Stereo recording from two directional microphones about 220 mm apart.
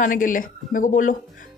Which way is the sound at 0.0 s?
35° left (ahead or behind).